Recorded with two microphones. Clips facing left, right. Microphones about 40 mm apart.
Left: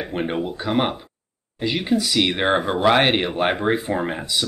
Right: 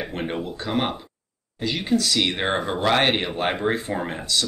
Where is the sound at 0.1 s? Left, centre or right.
Centre.